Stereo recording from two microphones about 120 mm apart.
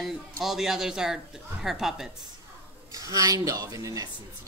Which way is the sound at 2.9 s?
30° right (ahead or behind).